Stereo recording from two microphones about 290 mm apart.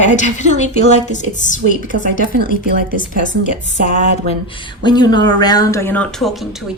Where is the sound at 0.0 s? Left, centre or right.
Left.